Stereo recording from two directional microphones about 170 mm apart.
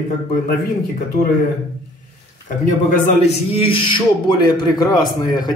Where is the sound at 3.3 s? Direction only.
35° left (ahead or behind).